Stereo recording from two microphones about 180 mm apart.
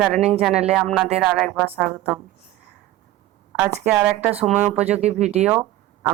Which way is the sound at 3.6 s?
10° right (ahead or behind).